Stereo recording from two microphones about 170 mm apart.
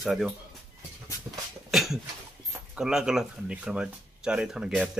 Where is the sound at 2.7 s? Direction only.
5° right (ahead or behind).